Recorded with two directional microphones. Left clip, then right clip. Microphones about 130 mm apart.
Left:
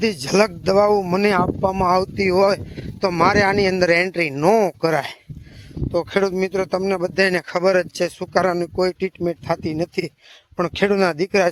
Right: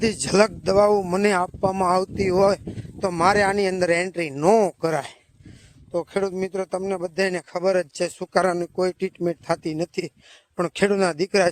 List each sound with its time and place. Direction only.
0.0 s speech: 40° right (ahead or behind)
1.9 s speech: 30° right (ahead or behind); by 7.9 s 10° right (ahead or behind)
7.9 s speech: 30° right (ahead or behind)
9.7 s speech: 25° right (ahead or behind)